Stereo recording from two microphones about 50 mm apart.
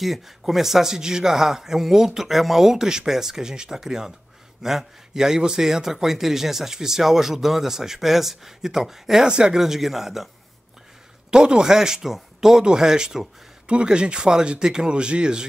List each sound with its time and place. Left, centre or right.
0.0 s a man's voice: centre
11.2 s a man's voice: centre